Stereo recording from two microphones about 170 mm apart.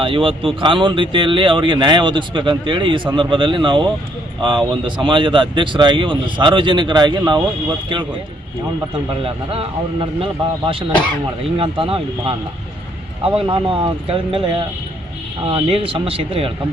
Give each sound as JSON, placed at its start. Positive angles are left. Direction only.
{"t": 0.0, "sound": "speech", "side_deg": -30}
{"t": 9.2, "sound": "speech", "side_deg": -30}
{"t": 11.5, "sound": "speech", "side_deg": -30}
{"t": 13.4, "sound": "speech", "side_deg": -30}